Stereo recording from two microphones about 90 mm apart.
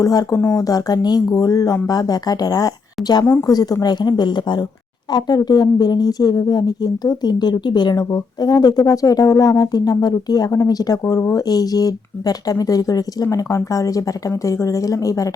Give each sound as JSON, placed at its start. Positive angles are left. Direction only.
{"t": 0.0, "sound": "speech", "side_deg": 40}